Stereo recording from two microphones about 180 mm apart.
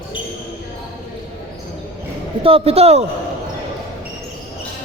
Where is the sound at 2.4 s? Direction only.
35° right (ahead or behind).